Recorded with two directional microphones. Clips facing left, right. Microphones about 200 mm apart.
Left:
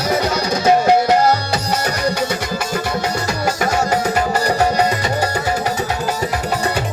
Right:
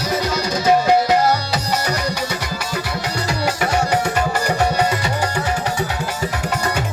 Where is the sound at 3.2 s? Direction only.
45° left (ahead or behind).